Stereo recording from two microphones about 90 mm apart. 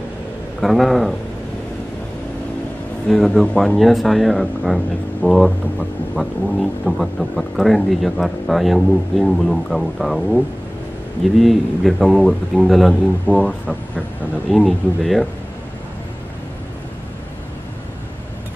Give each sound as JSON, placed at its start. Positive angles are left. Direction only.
{"t": 0.6, "sound": "speech", "side_deg": 0}
{"t": 3.1, "sound": "speech", "side_deg": 0}